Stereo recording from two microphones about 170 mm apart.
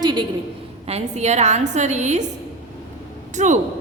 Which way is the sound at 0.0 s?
25° right (ahead or behind).